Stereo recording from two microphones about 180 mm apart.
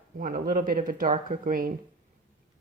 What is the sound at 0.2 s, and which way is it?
A woman's voice, 50° right (ahead or behind).